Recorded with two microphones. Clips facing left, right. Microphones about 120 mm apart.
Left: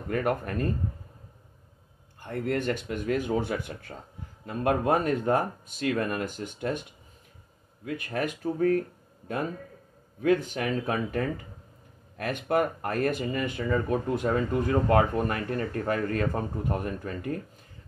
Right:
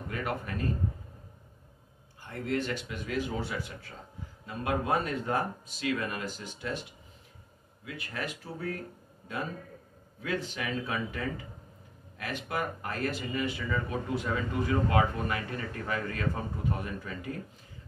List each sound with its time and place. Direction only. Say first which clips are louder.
0.1 s speech: left 7 dB; 50° left (ahead or behind)
2.2 s speech: left 4 dB; 50° left (ahead or behind)
7.8 s speech: left 7 dB; 50° left (ahead or behind)
10.2 s speech: left 9 dB; 50° left (ahead or behind)